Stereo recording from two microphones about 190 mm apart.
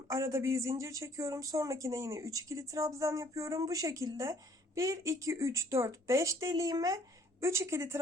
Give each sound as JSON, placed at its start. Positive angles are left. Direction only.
{"t": 0.3, "sound": "speech", "side_deg": -15}